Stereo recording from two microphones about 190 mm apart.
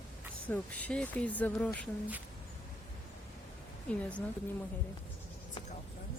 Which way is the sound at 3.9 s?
5° left (ahead or behind).